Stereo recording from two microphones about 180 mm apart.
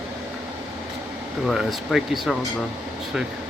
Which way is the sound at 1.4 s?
Centre (ahead or behind).